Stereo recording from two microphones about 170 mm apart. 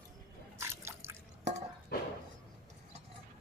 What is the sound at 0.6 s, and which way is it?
Drip, 15° right (ahead or behind).